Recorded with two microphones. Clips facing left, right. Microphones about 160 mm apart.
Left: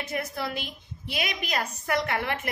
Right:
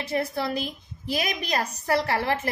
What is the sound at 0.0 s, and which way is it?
A woman's voice, 30° right (ahead or behind).